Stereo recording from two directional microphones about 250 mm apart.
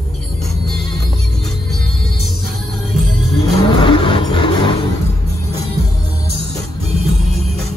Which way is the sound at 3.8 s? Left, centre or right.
Left.